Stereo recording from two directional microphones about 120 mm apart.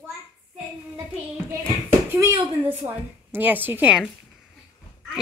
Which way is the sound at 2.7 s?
15° right (ahead or behind).